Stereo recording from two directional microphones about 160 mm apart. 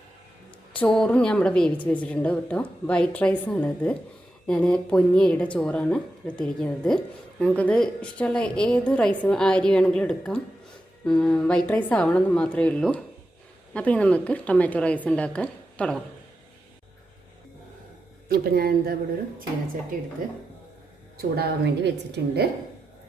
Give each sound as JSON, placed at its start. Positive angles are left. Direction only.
{"t": 0.7, "sound": "a woman's voice", "side_deg": 5}
{"t": 18.3, "sound": "speech", "side_deg": -70}
{"t": 21.2, "sound": "a woman's voice", "side_deg": -75}